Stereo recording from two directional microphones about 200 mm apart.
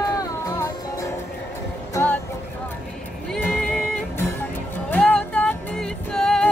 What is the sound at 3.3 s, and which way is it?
Music, 5° left (ahead or behind).